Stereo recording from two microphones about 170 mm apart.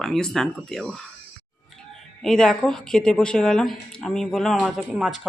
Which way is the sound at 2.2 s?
5° left (ahead or behind).